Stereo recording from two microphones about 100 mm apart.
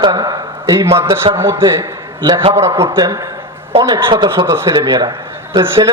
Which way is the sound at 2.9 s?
45° right (ahead or behind).